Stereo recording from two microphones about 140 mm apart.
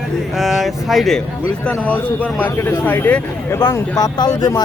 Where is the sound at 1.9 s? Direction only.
10° left (ahead or behind).